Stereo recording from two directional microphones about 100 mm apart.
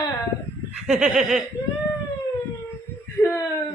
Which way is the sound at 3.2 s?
35° left (ahead or behind).